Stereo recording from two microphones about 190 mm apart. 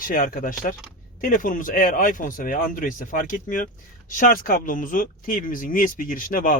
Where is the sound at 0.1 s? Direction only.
45° left (ahead or behind).